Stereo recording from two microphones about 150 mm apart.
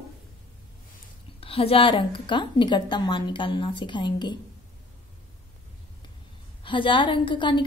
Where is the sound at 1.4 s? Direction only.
40° left (ahead or behind).